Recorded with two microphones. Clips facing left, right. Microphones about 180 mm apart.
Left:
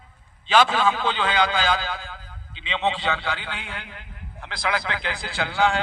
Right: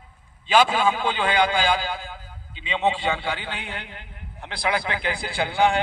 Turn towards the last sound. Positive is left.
turn(degrees=-15)  # may be behind; listen again after turning